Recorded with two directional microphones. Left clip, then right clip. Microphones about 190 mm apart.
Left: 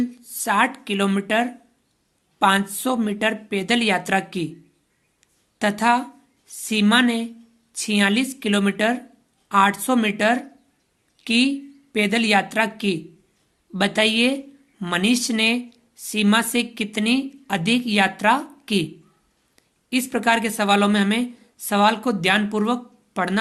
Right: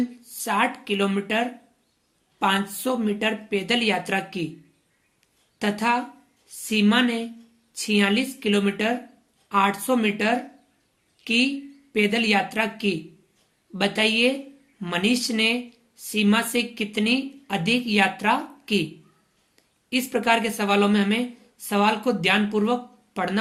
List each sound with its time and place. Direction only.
0.3 s speech: 45° left (ahead or behind)
5.5 s a woman's voice: 40° left (ahead or behind)